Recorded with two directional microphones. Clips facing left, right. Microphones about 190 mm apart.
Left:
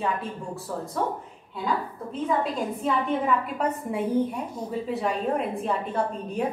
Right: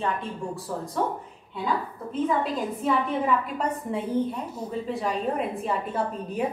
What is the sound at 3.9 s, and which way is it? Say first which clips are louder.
Speech: left 2 dB; 10° left (ahead or behind).